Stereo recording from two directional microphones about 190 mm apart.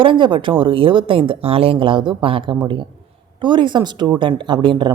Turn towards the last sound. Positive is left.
turn(degrees=-25)  # may be behind; listen again after turning